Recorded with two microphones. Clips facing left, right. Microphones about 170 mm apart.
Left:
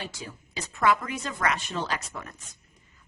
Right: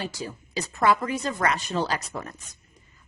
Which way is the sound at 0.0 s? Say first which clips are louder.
Right 5 dB; 35° right (ahead or behind).